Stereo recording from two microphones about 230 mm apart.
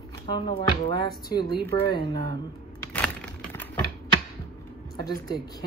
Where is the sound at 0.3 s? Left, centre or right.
Centre.